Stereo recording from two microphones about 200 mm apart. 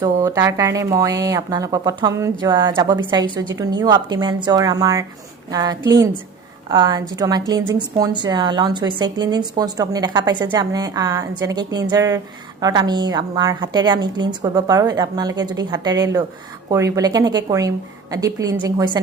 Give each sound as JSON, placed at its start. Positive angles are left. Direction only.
{"t": 0.0, "sound": "a woman's voice", "side_deg": -15}